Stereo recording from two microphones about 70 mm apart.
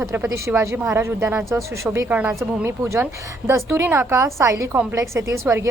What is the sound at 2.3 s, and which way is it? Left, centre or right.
A woman's voice, right.